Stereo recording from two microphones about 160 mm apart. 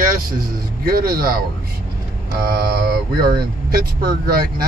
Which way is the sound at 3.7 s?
70° right (ahead or behind).